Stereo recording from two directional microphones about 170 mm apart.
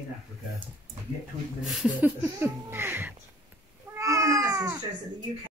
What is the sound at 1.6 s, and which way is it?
Speech, centre (ahead or behind).